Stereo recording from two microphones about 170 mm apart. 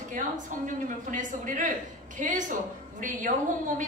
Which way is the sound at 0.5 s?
50° right (ahead or behind).